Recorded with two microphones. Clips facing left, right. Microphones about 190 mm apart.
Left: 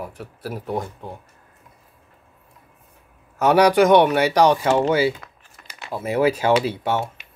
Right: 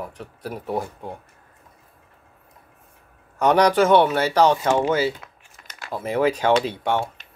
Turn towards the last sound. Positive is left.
turn(degrees=5)  # may be behind; listen again after turning